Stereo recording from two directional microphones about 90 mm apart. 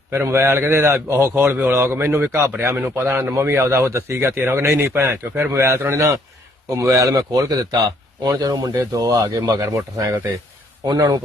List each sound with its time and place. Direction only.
0.1 s a man's voice: 30° right (ahead or behind)
10.8 s speech: 50° right (ahead or behind)